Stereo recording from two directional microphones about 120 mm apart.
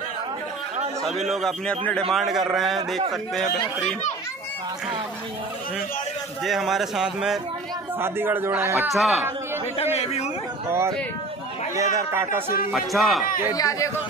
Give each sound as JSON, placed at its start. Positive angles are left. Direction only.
{"t": 1.0, "sound": "a man's voice", "side_deg": 0}
{"t": 6.4, "sound": "a man's voice", "side_deg": 0}
{"t": 8.0, "sound": "a man's voice", "side_deg": -20}
{"t": 8.9, "sound": "a man's voice", "side_deg": 0}
{"t": 9.9, "sound": "chatter", "side_deg": 60}
{"t": 11.7, "sound": "speech", "side_deg": -25}
{"t": 12.7, "sound": "a man's voice", "side_deg": 0}
{"t": 13.5, "sound": "speech", "side_deg": 30}